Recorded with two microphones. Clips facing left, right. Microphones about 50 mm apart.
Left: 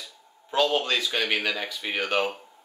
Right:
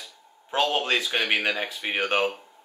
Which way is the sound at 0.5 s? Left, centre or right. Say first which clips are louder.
Even; right.